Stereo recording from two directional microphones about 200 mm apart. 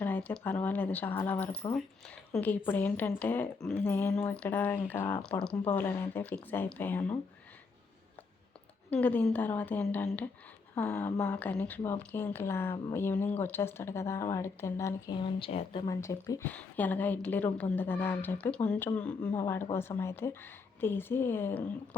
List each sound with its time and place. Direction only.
0.0 s a woman's voice: 5° left (ahead or behind)
8.9 s a woman's voice: 10° left (ahead or behind); by 15.8 s 25° left (ahead or behind)
15.9 s a woman's voice: 15° left (ahead or behind)